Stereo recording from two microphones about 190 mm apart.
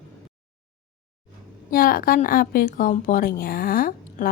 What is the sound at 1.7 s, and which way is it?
Speech, 50° left (ahead or behind).